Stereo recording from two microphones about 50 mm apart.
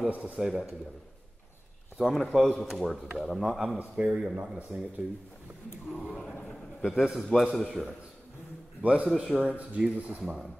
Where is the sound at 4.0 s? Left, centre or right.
Centre.